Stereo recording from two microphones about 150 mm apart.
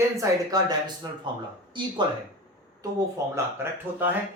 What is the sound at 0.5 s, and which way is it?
Speech, 25° right (ahead or behind).